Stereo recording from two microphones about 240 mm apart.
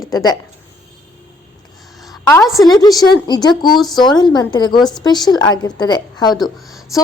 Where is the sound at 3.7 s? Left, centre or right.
Centre.